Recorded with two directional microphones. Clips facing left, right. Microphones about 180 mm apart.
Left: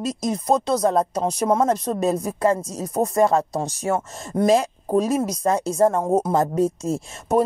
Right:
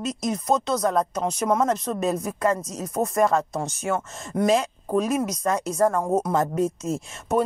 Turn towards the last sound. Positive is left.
turn(degrees=35)  # may be behind; listen again after turning